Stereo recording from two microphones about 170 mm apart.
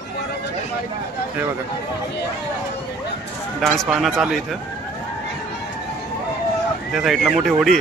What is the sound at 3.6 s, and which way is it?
Speech, centre (ahead or behind).